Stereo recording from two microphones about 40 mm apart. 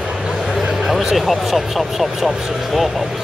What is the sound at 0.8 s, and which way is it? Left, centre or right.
Speech, centre.